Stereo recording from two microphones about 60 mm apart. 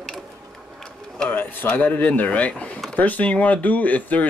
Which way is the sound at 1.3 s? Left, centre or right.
Left.